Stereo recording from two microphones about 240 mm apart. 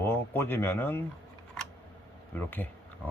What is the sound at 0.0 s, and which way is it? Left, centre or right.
Speech, centre.